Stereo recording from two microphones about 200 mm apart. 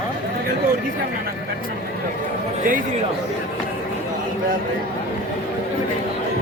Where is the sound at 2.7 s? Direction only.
45° right (ahead or behind).